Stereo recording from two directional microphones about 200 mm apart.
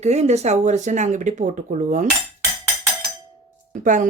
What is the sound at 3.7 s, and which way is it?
Speech, 40° right (ahead or behind).